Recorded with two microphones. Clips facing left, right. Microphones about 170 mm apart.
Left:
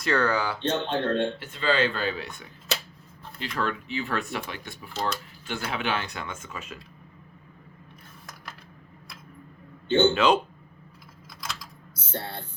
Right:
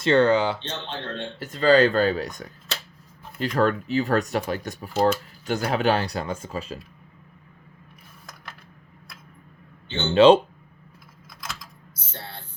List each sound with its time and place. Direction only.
0.0 s speech: 25° right (ahead or behind)
0.6 s speech: 55° left (ahead or behind)
1.4 s speech: 40° right (ahead or behind)
10.2 s speech: 30° right (ahead or behind)
11.3 s typing: centre (ahead or behind)